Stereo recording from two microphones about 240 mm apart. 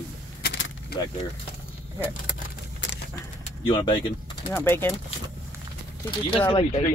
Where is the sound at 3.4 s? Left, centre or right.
Left.